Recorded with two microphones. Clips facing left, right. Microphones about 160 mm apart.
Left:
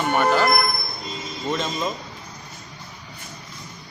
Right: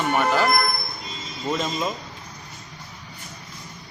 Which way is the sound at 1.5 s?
5° right (ahead or behind).